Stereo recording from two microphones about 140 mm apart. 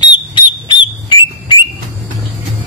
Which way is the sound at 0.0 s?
30° left (ahead or behind).